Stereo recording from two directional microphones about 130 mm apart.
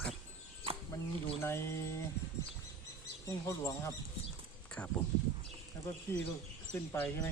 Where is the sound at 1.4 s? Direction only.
20° left (ahead or behind).